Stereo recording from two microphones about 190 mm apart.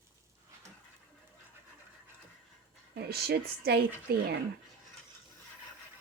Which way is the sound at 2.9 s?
55° right (ahead or behind).